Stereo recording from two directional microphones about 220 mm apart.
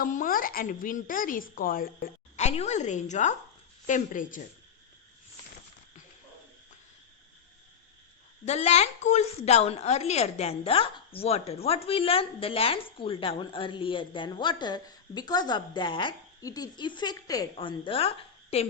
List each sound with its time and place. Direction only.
0.0 s speech: 40° left (ahead or behind)
8.4 s a woman's voice: 30° left (ahead or behind)